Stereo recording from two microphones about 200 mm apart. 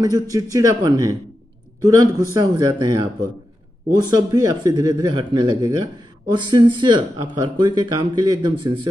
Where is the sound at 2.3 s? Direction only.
20° right (ahead or behind).